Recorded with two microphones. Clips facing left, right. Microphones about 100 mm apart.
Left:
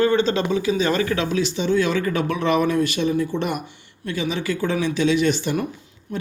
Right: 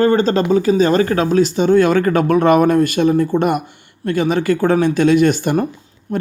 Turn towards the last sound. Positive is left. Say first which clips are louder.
# right 8 dB
turn(degrees=-45)  # may be behind; listen again after turning